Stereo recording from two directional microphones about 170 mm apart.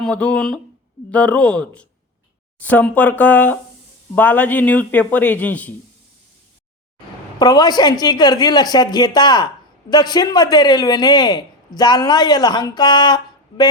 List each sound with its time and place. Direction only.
0.0 s a man's voice: 5° left (ahead or behind)
7.3 s speech: 25° left (ahead or behind)